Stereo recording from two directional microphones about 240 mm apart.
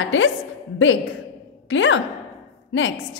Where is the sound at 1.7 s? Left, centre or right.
Left.